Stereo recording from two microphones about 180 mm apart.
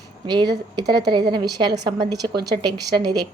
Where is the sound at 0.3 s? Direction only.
25° right (ahead or behind).